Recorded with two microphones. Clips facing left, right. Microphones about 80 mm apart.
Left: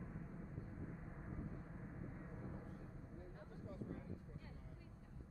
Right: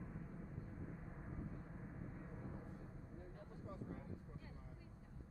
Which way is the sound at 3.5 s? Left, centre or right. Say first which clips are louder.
Left 1 dB; right.